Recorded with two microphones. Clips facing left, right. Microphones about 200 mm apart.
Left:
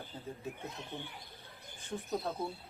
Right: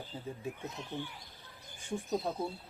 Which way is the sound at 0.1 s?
10° right (ahead or behind).